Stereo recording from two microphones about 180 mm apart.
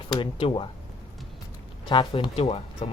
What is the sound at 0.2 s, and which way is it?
Speech, 30° left (ahead or behind).